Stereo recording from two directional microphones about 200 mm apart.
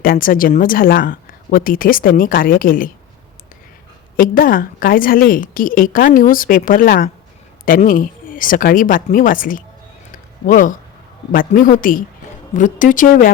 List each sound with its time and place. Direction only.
0.0 s a woman's voice: 45° left (ahead or behind)
4.2 s a woman's voice: 45° left (ahead or behind)